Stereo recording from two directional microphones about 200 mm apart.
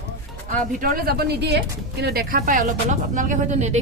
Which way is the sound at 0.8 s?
45° right (ahead or behind).